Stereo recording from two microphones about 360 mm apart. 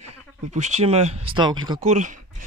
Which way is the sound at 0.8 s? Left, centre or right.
Centre.